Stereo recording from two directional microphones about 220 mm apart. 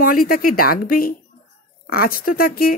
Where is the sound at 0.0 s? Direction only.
40° left (ahead or behind).